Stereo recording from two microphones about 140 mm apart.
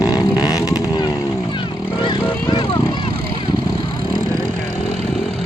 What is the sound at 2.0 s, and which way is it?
Vehicle, 35° left (ahead or behind).